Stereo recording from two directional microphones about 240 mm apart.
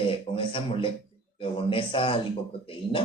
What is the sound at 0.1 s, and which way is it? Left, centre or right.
A man's voice, left.